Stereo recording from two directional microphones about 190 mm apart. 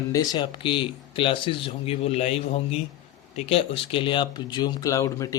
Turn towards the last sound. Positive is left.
turn(degrees=15)  # may be behind; listen again after turning